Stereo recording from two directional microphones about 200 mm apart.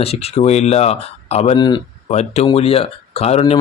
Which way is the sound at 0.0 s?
30° left (ahead or behind).